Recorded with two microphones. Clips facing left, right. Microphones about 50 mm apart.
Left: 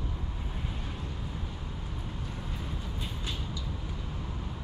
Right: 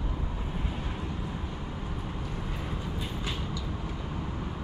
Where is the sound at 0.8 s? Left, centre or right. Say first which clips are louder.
Right 4 dB; right.